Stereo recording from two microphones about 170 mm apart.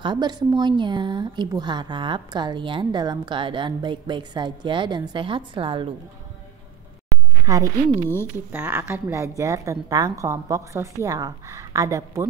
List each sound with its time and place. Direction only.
0.0 s speech: 25° right (ahead or behind)
7.4 s speech: 20° right (ahead or behind)
8.5 s a woman's voice: 10° right (ahead or behind)